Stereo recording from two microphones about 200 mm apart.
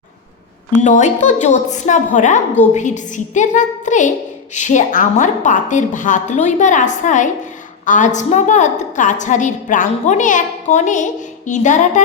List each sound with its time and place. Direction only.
0.9 s a woman's voice: 40° left (ahead or behind)